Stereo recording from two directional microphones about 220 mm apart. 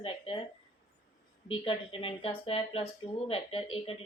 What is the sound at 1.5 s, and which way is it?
Speech, 25° left (ahead or behind).